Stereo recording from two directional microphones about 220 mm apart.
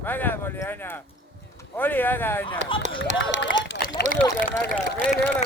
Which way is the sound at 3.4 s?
55° left (ahead or behind).